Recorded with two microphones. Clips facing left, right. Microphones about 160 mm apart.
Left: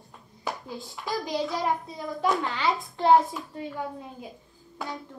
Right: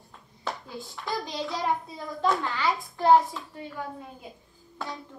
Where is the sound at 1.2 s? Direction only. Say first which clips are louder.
Left 5 dB; 20° left (ahead or behind).